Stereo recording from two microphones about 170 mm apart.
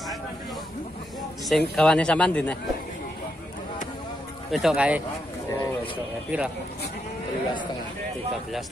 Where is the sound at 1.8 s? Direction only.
5° left (ahead or behind).